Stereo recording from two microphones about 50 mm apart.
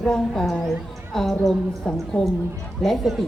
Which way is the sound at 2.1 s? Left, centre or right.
Left.